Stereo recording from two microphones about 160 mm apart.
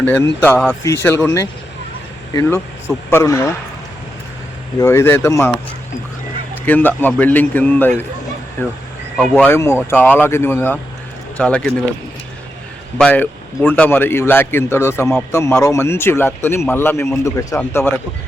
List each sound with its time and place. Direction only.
0.0 s speech: 10° left (ahead or behind)
4.8 s speech: 15° left (ahead or behind)
6.7 s speech: 10° left (ahead or behind)
13.0 s speech: 10° left (ahead or behind)